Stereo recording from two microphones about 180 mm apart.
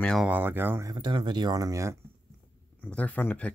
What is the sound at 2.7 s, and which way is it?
Speech, 5° left (ahead or behind).